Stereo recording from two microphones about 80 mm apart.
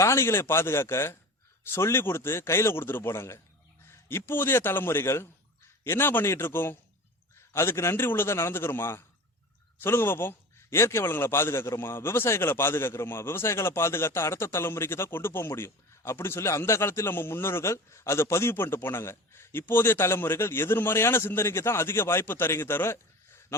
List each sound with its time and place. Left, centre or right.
0.0 s a man's voice: left